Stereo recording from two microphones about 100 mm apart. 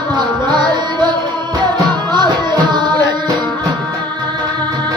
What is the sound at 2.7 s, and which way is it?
Music, 45° right (ahead or behind).